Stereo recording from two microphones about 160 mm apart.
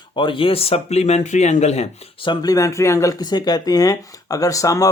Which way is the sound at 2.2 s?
25° left (ahead or behind).